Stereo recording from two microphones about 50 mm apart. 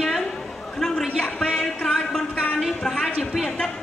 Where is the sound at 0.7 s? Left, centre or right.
Centre.